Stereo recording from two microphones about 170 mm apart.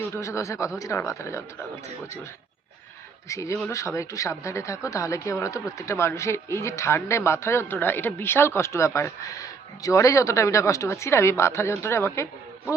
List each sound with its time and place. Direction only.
0.1 s speech: 15° left (ahead or behind)
3.2 s speech: 15° left (ahead or behind)